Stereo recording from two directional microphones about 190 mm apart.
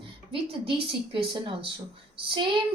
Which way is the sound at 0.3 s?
25° right (ahead or behind).